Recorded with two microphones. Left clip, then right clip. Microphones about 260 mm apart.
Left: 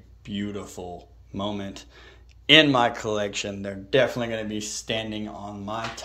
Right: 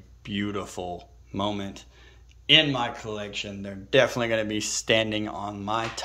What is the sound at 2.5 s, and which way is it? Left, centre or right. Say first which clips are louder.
Speech: left 4 dB; centre.